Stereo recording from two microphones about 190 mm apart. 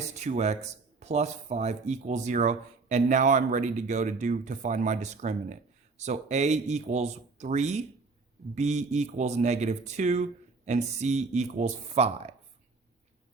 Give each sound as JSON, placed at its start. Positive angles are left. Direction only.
{"t": 0.2, "sound": "speech", "side_deg": -35}